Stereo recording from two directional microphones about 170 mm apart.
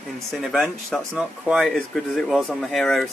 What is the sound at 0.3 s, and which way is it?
Speech, centre (ahead or behind).